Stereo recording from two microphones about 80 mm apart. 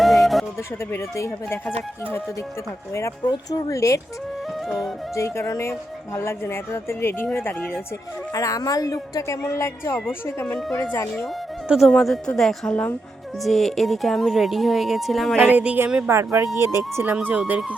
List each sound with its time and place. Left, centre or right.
0.0 s a sound: centre
0.9 s speech: left
3.2 s speech: left
5.1 s speech: left
8.3 s speech: left
11.9 s speech: centre
15.4 s speech: centre
16.0 s speech: right
17.2 s speech: centre